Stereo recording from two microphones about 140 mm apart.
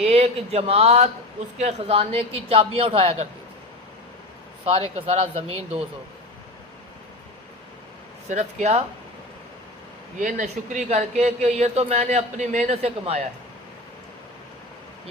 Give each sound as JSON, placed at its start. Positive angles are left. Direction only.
{"t": 0.0, "sound": "speech", "side_deg": -45}
{"t": 4.9, "sound": "speech", "side_deg": -45}
{"t": 8.3, "sound": "speech", "side_deg": -60}
{"t": 10.2, "sound": "speech", "side_deg": -70}